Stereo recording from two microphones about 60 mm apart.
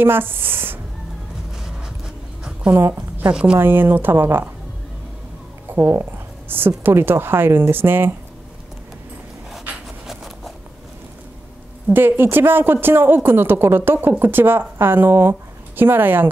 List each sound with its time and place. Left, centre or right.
0.0 s speech: right
2.9 s a woman's voice: right
3.5 s speech: right
5.7 s a sound: right
6.8 s speech: right
10.0 s zipper: centre
11.9 s speech: right